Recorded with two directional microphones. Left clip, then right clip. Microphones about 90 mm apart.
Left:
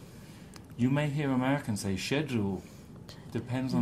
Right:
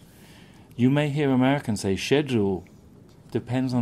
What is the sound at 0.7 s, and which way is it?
Speech, 30° right (ahead or behind).